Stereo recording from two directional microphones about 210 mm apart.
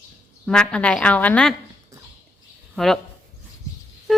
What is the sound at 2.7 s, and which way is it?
Speech, centre (ahead or behind).